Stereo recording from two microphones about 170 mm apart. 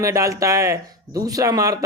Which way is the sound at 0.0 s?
20° right (ahead or behind).